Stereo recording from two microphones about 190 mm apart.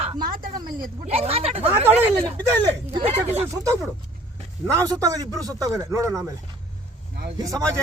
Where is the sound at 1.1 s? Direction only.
30° right (ahead or behind).